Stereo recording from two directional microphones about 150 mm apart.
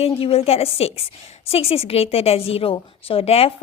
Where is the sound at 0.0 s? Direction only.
40° left (ahead or behind).